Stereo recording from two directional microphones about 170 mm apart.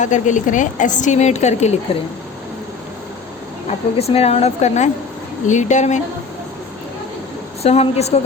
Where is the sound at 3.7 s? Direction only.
35° left (ahead or behind).